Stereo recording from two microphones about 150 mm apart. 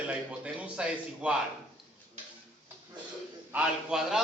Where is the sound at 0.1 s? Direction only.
10° right (ahead or behind).